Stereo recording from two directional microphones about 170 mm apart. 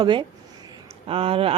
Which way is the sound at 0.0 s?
30° right (ahead or behind).